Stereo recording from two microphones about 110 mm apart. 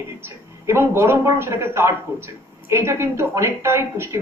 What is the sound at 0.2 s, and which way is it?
A man's voice, 20° right (ahead or behind).